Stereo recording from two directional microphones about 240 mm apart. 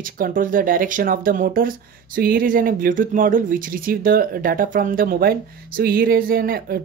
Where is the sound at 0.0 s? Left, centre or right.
Right.